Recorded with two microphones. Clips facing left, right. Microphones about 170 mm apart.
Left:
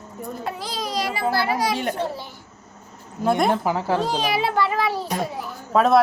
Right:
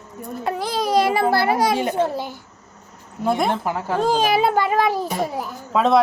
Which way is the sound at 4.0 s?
50° right (ahead or behind).